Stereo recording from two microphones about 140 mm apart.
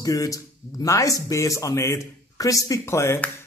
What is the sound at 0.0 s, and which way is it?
A woman's voice, 25° left (ahead or behind).